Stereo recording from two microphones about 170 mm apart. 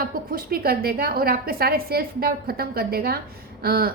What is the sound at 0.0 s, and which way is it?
A woman's voice, 60° right (ahead or behind).